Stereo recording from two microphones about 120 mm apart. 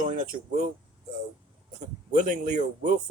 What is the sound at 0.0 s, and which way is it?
Speech, 90° right.